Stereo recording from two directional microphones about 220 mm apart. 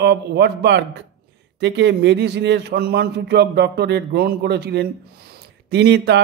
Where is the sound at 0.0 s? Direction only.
50° right (ahead or behind).